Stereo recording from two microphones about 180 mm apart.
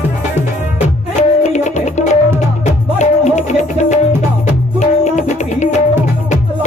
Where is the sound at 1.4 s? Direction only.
40° left (ahead or behind).